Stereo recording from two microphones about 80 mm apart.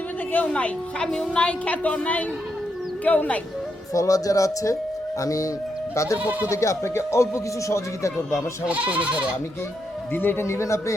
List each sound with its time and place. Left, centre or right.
0.4 s a woman's voice: centre
3.9 s speech: left
5.9 s goat: left
6.1 s speech: centre
6.5 s speech: left
8.6 s speech: centre
10.1 s speech: left